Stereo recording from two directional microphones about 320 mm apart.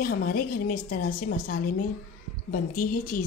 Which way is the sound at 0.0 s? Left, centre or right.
Left.